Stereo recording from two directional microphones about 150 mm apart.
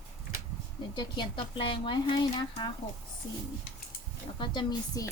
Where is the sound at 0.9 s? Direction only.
30° left (ahead or behind).